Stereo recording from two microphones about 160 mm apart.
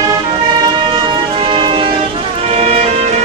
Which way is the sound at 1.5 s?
30° right (ahead or behind).